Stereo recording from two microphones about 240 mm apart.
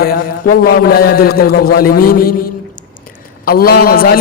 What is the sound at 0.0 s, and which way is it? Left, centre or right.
A man's voice, left.